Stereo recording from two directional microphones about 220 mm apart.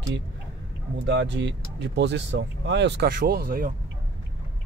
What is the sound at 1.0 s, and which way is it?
Speech, 50° right (ahead or behind).